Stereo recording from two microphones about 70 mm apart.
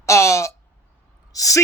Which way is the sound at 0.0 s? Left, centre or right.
Left.